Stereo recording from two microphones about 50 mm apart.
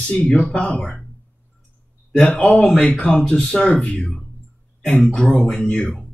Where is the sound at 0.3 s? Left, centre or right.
Left.